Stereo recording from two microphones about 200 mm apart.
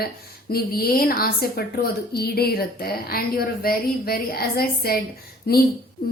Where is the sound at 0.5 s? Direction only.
50° left (ahead or behind).